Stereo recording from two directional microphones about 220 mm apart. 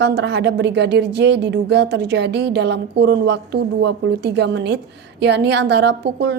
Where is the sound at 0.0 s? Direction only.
50° right (ahead or behind).